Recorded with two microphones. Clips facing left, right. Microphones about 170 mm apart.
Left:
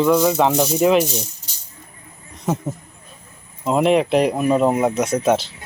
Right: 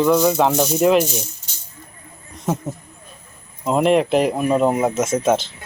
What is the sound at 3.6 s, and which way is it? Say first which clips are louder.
Speech: even; centre (ahead or behind).